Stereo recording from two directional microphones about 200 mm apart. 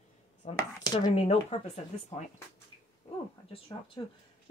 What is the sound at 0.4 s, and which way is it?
Speech, 35° left (ahead or behind).